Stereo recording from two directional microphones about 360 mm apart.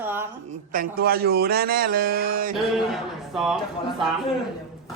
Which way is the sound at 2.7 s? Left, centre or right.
Centre.